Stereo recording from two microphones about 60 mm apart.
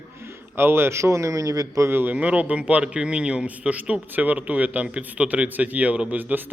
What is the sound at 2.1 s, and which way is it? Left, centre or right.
A man's voice, right.